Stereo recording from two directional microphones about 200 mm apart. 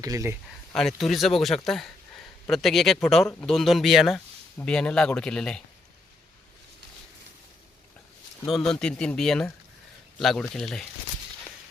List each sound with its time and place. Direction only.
0.0 s speech: 15° right (ahead or behind)
0.7 s speech: centre (ahead or behind)
8.4 s speech: centre (ahead or behind)